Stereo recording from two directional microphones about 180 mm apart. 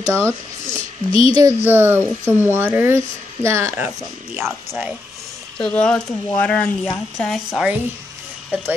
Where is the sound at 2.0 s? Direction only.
10° left (ahead or behind).